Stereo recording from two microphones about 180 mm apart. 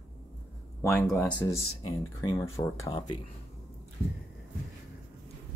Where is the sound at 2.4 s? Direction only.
15° left (ahead or behind).